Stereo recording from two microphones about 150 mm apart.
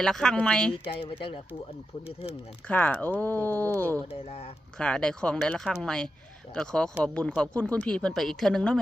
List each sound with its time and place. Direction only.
0.0 s speech: 5° left (ahead or behind)
0.9 s speech: 35° left (ahead or behind)
2.6 s speech: 10° left (ahead or behind)
4.1 s speech: 45° left (ahead or behind)
4.8 s speech: 5° left (ahead or behind)